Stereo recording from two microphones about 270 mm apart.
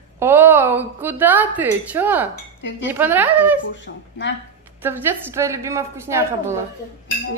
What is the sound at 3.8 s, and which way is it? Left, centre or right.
Speech, left.